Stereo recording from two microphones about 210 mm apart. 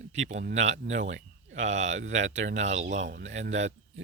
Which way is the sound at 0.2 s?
35° right (ahead or behind).